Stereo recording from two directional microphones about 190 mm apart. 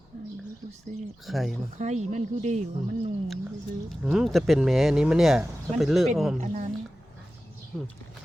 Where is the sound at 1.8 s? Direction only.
40° right (ahead or behind).